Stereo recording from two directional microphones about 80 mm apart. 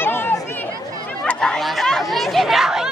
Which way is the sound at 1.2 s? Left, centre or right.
Centre.